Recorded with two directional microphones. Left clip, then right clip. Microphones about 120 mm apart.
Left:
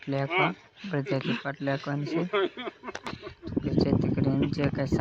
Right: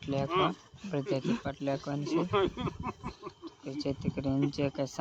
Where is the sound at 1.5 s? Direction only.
10° left (ahead or behind).